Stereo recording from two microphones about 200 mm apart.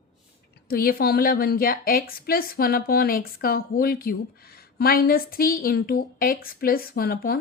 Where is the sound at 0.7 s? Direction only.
50° left (ahead or behind).